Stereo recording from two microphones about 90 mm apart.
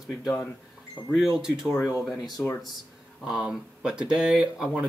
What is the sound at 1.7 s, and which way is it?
Speech, 25° left (ahead or behind).